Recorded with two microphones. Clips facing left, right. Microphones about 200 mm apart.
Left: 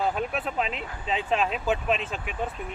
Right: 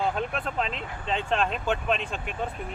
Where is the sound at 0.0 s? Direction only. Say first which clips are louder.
Left 1 dB; 5° left (ahead or behind).